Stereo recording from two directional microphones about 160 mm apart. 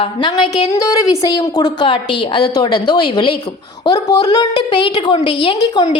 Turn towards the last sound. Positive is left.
turn(degrees=25)  # may be behind; listen again after turning